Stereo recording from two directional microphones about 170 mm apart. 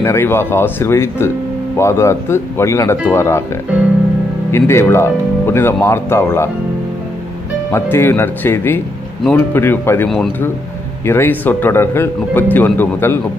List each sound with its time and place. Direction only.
0.0 s speech: 15° left (ahead or behind)
4.5 s speech: 15° left (ahead or behind)
7.7 s speech: 15° left (ahead or behind)